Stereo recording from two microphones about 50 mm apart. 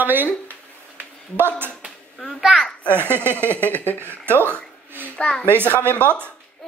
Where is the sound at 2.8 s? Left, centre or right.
Right.